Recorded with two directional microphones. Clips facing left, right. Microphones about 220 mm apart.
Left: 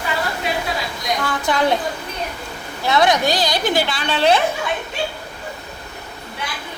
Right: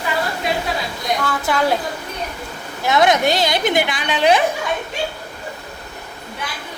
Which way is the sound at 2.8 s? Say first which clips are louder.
Right 1 dB; 20° right (ahead or behind).